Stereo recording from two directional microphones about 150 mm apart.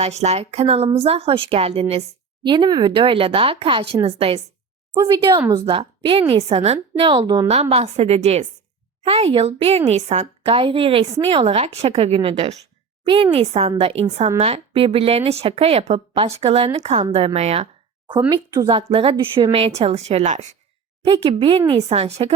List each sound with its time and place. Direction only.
0.0 s a woman's voice: 45° right (ahead or behind)
2.4 s a woman's voice: 30° right (ahead or behind)
4.9 s a woman's voice: 30° right (ahead or behind)
7.4 s a woman's voice: 45° right (ahead or behind)
18.3 s speech: 25° right (ahead or behind)
18.7 s a woman's voice: 40° right (ahead or behind)
21.0 s a woman's voice: 35° right (ahead or behind)